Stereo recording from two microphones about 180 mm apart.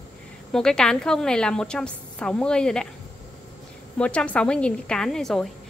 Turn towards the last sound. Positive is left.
turn(degrees=0)  # may be behind; listen again after turning